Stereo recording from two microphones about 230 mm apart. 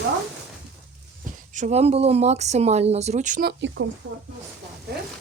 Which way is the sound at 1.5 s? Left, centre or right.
Right.